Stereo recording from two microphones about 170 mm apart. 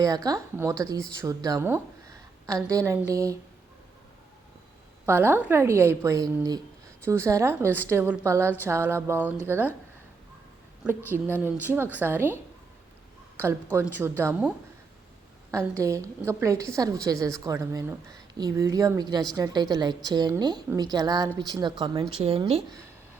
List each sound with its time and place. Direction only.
0.0 s a woman's voice: 20° right (ahead or behind)
5.0 s a woman's voice: 10° right (ahead or behind)
10.8 s a woman's voice: 15° right (ahead or behind)
13.7 s a woman's voice: 10° right (ahead or behind)
15.8 s a woman's voice: 15° right (ahead or behind); by 22.6 s 35° right (ahead or behind)